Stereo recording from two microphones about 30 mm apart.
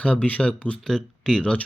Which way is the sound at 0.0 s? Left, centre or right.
Left.